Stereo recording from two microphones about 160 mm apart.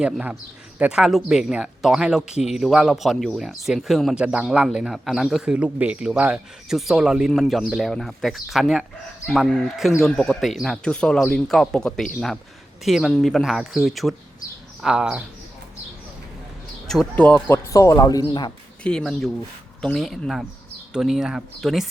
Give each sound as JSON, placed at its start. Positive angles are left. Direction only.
{"t": 0.0, "sound": "speech", "side_deg": -5}
{"t": 16.8, "sound": "speech", "side_deg": 5}
{"t": 17.7, "sound": "speech", "side_deg": 20}
{"t": 18.8, "sound": "speech", "side_deg": 5}